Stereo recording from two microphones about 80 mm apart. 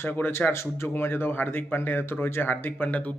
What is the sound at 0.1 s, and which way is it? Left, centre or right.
Speech, left.